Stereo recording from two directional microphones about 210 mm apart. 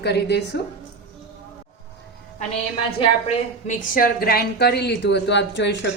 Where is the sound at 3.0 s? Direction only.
35° left (ahead or behind); by 5.9 s 55° left (ahead or behind).